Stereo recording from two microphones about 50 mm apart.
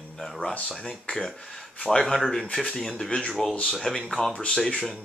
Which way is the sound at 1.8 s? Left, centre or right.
Centre.